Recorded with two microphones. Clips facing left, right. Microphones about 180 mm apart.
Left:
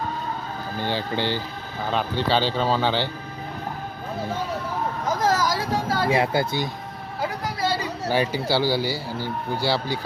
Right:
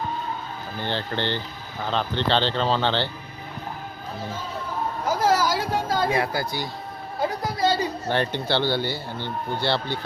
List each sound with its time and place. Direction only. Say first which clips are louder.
0.8 s speech: left 2 dB; 10° left (ahead or behind)
5.0 s a sound: right 1 dB; 10° right (ahead or behind)
6.1 s speech: left 3 dB; 20° left (ahead or behind)
7.6 s speech: right 3 dB; 5° left (ahead or behind)